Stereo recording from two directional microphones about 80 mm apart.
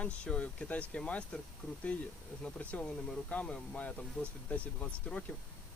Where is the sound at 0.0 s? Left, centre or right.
Centre.